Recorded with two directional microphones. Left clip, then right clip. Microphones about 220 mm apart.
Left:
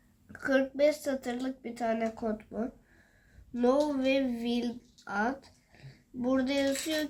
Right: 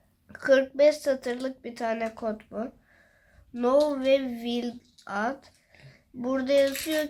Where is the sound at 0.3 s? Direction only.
35° right (ahead or behind).